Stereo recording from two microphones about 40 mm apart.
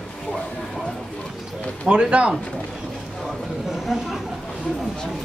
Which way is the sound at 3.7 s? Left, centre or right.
Centre.